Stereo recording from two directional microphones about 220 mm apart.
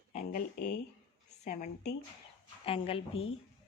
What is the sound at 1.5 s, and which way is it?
Speech, 35° left (ahead or behind).